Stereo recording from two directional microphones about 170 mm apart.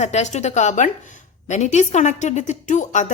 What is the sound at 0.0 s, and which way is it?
A woman's voice, 40° left (ahead or behind).